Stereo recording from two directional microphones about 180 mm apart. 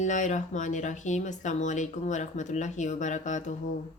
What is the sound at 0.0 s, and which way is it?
Speech, 45° left (ahead or behind).